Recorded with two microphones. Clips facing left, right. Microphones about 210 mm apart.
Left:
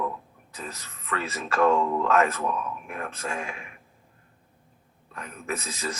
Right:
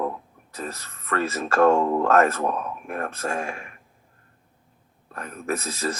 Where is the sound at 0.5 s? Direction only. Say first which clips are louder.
Right 5 dB; 60° right (ahead or behind).